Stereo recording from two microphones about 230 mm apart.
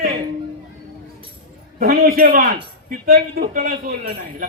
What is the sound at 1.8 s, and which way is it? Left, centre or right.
Speech, right.